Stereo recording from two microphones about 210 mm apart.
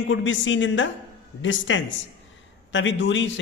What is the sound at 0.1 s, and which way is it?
A man's voice, 65° left (ahead or behind).